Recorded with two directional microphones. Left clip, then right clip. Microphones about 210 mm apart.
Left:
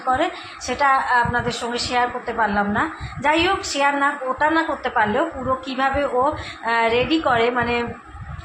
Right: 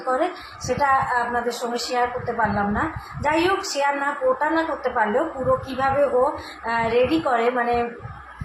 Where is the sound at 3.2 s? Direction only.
15° left (ahead or behind).